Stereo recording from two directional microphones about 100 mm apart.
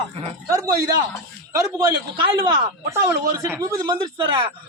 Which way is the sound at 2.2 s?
55° right (ahead or behind).